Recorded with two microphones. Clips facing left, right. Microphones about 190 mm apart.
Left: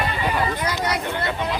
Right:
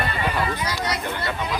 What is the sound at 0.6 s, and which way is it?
Speech, 55° left (ahead or behind).